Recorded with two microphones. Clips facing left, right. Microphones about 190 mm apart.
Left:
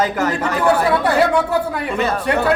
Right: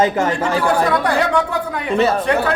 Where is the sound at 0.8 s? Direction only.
5° left (ahead or behind).